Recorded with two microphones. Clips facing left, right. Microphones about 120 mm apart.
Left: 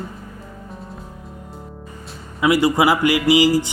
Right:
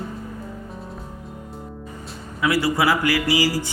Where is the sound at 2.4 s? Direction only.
20° left (ahead or behind).